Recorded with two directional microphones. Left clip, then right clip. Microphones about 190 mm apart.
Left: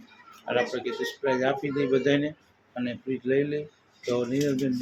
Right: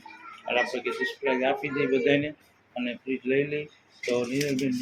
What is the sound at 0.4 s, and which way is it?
Speech, 10° left (ahead or behind).